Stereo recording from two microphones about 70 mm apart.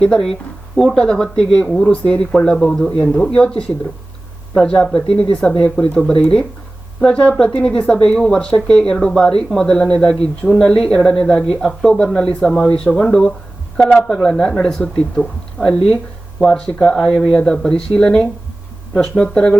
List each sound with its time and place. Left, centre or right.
0.0 s speech: centre